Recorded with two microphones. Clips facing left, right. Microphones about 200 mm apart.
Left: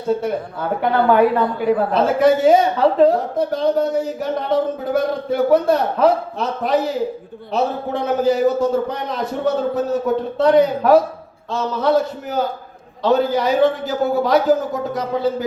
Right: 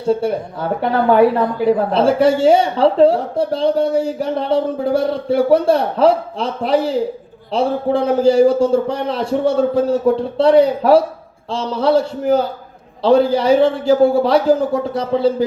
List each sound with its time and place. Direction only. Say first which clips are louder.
0.1 s a man's voice: right 3 dB; 30° right (ahead or behind)